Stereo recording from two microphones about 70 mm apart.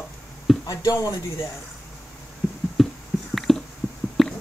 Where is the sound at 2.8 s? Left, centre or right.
Centre.